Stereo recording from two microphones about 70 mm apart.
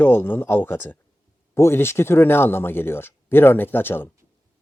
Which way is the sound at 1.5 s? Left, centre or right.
Left.